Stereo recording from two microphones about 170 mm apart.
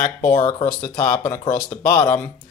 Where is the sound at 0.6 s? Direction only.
15° left (ahead or behind).